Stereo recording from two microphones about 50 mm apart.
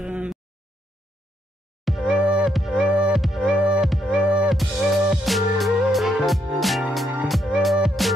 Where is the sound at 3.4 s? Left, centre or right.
Right.